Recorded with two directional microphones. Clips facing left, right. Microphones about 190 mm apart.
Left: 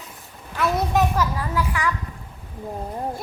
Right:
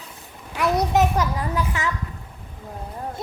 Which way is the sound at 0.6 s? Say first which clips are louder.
Right 1 dB; 20° right (ahead or behind).